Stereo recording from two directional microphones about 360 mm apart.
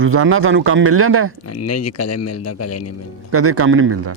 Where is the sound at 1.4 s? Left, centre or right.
Left.